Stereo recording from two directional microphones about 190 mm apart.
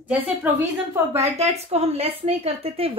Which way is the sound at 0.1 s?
10° right (ahead or behind).